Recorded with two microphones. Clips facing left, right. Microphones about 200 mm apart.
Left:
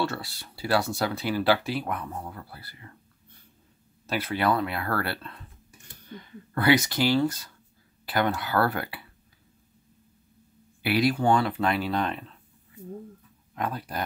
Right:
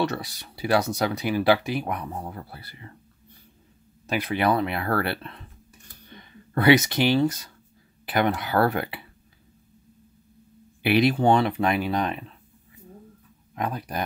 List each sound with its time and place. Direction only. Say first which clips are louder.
0.0 s speech: right 3 dB; 20° right (ahead or behind)
4.1 s speech: right 2 dB; 15° right (ahead or behind)
6.5 s speech: right 4 dB; 20° right (ahead or behind)
10.8 s speech: right 3 dB; 20° right (ahead or behind)
13.6 s speech: right 2 dB; 15° right (ahead or behind)